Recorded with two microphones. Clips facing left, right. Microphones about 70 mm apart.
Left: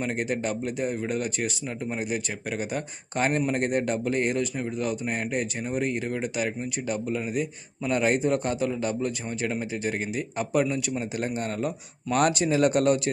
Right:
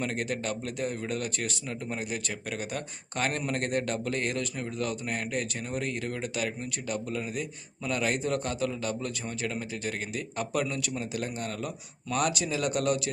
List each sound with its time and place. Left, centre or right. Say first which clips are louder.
0.0 s speech: left 4 dB; left